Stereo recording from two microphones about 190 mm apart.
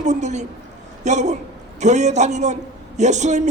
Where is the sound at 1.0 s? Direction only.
35° right (ahead or behind).